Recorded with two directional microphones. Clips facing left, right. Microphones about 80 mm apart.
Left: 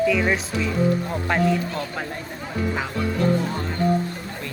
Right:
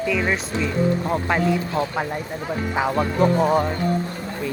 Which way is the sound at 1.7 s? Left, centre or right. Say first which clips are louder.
Right 6 dB; centre.